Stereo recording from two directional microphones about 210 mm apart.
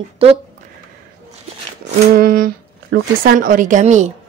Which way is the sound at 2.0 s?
45° right (ahead or behind).